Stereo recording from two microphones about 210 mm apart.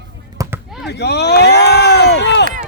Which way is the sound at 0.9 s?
55° left (ahead or behind).